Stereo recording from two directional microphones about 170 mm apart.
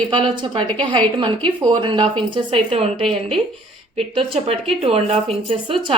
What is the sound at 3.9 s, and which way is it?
Speech, 35° right (ahead or behind).